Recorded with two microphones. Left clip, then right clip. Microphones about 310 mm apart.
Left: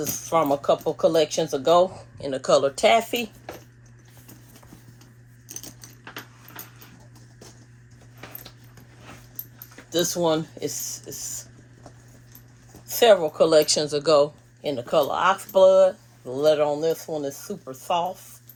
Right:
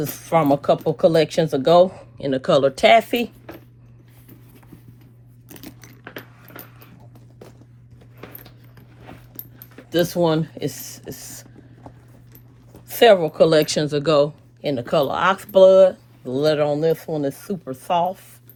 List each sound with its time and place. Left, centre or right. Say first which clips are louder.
0.0 s speech: right 3 dB; right
9.9 s speech: right 3 dB; right
13.3 s speech: right 2 dB; right